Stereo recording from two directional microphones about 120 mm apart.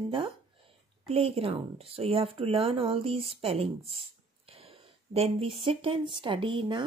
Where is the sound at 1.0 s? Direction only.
55° right (ahead or behind).